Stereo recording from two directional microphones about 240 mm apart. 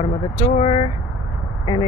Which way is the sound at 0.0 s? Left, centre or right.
Left.